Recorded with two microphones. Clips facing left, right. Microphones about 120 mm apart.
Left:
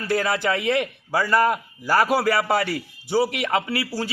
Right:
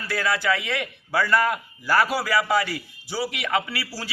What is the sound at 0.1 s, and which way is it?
A man's voice, 50° left (ahead or behind).